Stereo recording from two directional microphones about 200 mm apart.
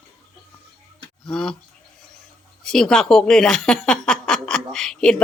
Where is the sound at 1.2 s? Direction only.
5° left (ahead or behind).